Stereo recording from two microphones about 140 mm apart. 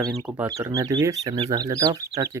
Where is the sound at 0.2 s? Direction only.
15° right (ahead or behind).